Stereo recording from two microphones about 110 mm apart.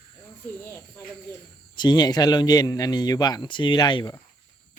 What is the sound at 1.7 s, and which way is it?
Speech, 40° left (ahead or behind).